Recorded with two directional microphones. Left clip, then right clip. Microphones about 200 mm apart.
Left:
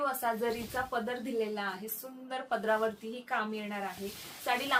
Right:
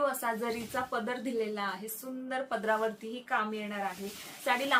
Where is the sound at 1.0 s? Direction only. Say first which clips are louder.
Right 1 dB; 20° right (ahead or behind).